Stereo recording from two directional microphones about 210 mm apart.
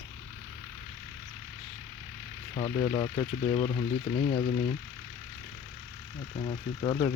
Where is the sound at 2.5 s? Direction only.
25° left (ahead or behind).